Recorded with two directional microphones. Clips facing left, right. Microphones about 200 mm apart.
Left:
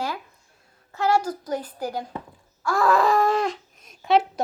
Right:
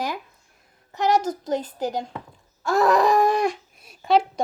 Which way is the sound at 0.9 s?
20° right (ahead or behind).